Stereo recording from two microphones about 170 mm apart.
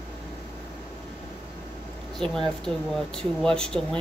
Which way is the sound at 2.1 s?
Centre (ahead or behind).